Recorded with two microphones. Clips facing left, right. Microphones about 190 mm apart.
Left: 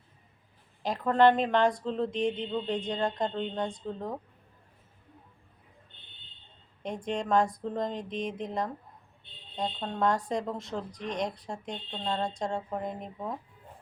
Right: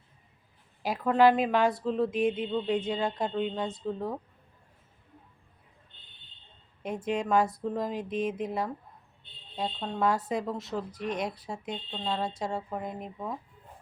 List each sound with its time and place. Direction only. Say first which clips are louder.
0.8 s speech: even; 5° right (ahead or behind)
6.8 s speech: right 2 dB; 5° right (ahead or behind)